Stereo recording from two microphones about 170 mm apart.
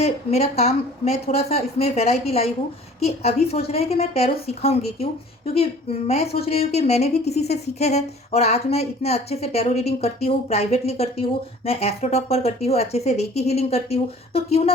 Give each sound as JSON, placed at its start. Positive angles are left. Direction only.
{"t": 0.0, "sound": "speech", "side_deg": 40}
{"t": 6.4, "sound": "speech", "side_deg": 35}